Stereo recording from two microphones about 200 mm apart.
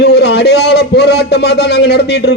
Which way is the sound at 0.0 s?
55° left (ahead or behind).